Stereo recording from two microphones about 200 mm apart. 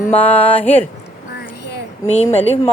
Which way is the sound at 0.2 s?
5° left (ahead or behind).